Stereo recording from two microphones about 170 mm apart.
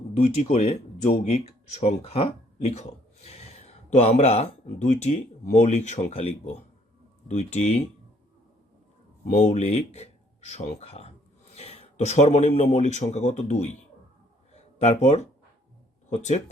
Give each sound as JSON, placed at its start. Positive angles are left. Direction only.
{"t": 0.2, "sound": "speech", "side_deg": 40}
{"t": 3.8, "sound": "speech", "side_deg": 40}
{"t": 9.3, "sound": "speech", "side_deg": 40}
{"t": 11.5, "sound": "a sound", "side_deg": 40}
{"t": 12.7, "sound": "speech", "side_deg": 40}
{"t": 14.8, "sound": "speech", "side_deg": 40}